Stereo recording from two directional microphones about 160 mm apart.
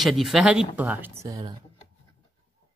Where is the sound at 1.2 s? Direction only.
25° right (ahead or behind).